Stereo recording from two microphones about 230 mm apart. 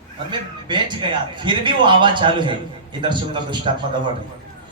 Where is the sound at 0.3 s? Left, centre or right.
Centre.